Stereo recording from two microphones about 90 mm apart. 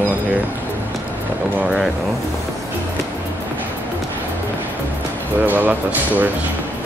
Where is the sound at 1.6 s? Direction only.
10° right (ahead or behind).